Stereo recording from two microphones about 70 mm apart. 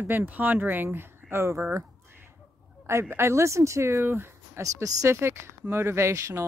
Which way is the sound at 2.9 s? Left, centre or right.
Right.